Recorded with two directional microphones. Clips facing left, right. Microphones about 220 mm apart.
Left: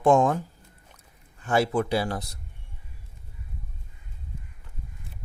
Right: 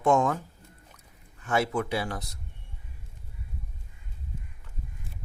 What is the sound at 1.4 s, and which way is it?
Speech, 30° left (ahead or behind).